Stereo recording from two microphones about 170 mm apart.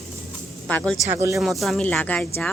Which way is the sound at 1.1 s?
20° right (ahead or behind).